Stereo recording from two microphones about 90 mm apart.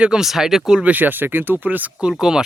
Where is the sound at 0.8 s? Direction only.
20° right (ahead or behind).